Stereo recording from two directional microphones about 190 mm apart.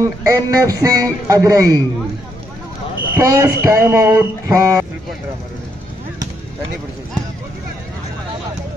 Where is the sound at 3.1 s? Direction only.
15° right (ahead or behind).